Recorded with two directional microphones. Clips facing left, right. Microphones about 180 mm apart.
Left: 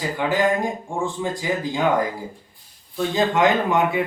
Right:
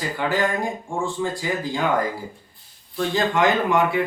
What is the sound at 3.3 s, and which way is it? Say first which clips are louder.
Speech: even; 20° left (ahead or behind).